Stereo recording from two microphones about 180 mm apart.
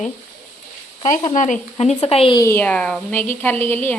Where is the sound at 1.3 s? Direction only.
45° left (ahead or behind).